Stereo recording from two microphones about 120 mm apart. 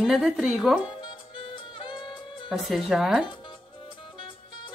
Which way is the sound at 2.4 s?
Centre (ahead or behind).